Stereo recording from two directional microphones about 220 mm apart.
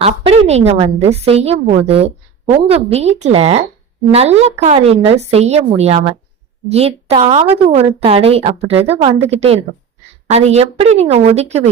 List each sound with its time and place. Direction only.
0.0 s a woman's voice: 30° right (ahead or behind)